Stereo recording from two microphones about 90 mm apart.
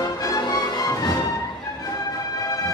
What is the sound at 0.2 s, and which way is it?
Music, 45° left (ahead or behind).